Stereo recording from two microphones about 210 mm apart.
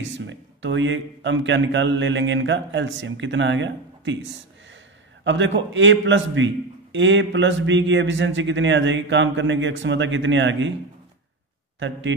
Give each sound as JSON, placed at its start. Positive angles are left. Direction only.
{"t": 0.0, "sound": "a man's voice", "side_deg": -60}
{"t": 5.2, "sound": "a man's voice", "side_deg": -60}